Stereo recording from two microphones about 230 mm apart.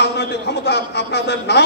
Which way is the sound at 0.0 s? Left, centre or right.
Left.